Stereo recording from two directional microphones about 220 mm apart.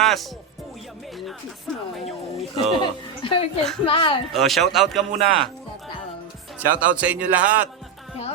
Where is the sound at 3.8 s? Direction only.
25° left (ahead or behind).